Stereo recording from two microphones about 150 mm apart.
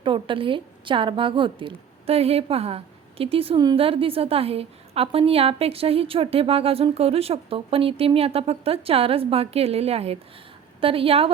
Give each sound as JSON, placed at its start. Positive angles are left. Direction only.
{"t": 0.0, "sound": "a woman's voice", "side_deg": -35}